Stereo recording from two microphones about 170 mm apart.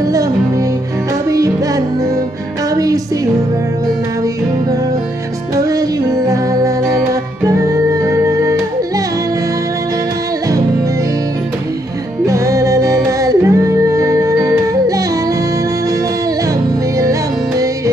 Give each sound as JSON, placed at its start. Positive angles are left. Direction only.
{"t": 0.0, "sound": "music", "side_deg": -20}
{"t": 2.7, "sound": "speech", "side_deg": -20}
{"t": 5.6, "sound": "music", "side_deg": -20}
{"t": 12.3, "sound": "music", "side_deg": -20}